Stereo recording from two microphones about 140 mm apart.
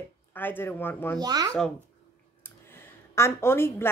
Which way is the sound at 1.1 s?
25° right (ahead or behind).